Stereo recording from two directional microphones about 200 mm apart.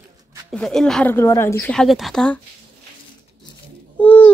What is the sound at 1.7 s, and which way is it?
Speech, centre (ahead or behind).